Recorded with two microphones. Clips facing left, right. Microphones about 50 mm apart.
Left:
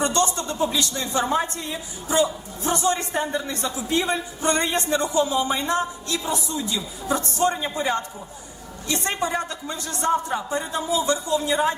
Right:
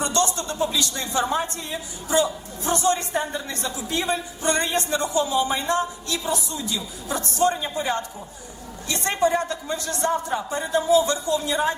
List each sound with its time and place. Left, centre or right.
0.0 s a man's voice: left